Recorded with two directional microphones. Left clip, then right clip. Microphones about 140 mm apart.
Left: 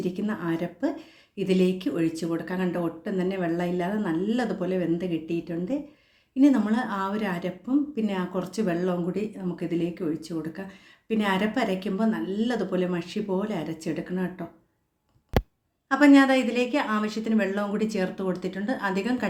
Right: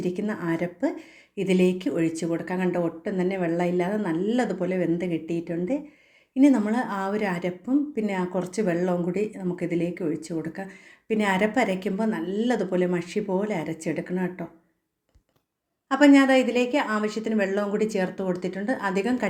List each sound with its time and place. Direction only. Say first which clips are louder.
0.0 s speech: right 1 dB; 20° right (ahead or behind)
0.9 s speech: right 1 dB; 50° left (ahead or behind)
1.5 s speech: right 2 dB; 20° right (ahead or behind)
15.9 s a woman's voice: right 1 dB; 15° right (ahead or behind)